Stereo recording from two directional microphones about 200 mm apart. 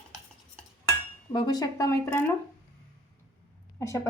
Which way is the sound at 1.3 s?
20° left (ahead or behind).